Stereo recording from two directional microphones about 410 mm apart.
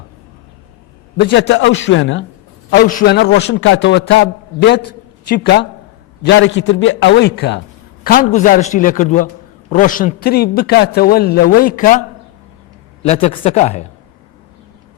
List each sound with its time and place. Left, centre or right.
1.1 s a man's voice: left